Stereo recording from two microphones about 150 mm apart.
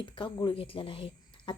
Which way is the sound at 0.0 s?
30° left (ahead or behind).